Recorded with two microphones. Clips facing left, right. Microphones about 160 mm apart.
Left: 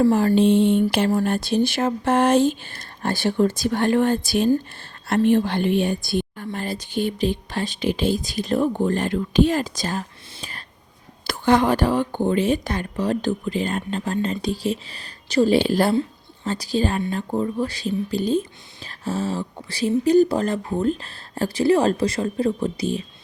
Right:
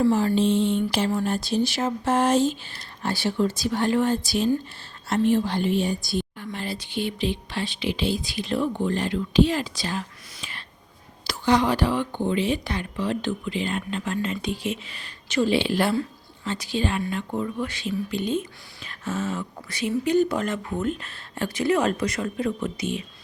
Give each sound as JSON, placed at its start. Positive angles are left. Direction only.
{"t": 0.0, "sound": "a sound", "side_deg": 45}
{"t": 6.4, "sound": "speech", "side_deg": 45}
{"t": 10.3, "sound": "whispering", "side_deg": 40}
{"t": 11.3, "sound": "speech", "side_deg": 50}